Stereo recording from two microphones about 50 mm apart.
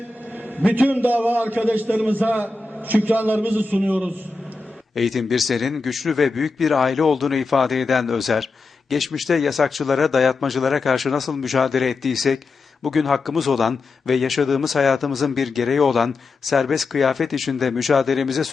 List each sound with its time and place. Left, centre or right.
0.4 s a man's voice: right
4.9 s a man's voice: centre